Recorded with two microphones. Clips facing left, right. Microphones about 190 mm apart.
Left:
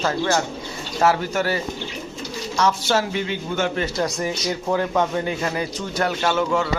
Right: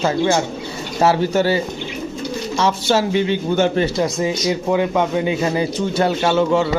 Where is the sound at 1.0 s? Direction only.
30° right (ahead or behind).